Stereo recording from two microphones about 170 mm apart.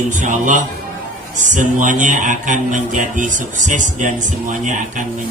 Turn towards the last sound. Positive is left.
turn(degrees=-50)  # may be behind; listen again after turning